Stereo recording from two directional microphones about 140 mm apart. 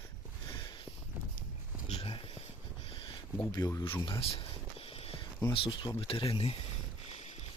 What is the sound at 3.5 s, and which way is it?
Speech, 30° left (ahead or behind).